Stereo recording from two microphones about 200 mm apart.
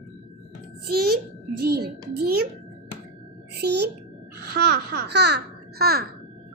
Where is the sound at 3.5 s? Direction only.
55° right (ahead or behind).